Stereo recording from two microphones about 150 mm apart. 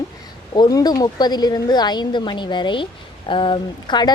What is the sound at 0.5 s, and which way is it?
A woman's voice, 25° left (ahead or behind).